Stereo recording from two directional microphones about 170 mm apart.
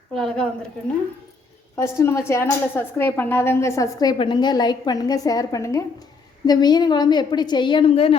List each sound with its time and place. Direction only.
0.1 s speech: 5° left (ahead or behind)
1.7 s a woman's voice: 15° left (ahead or behind); by 8.1 s 30° left (ahead or behind)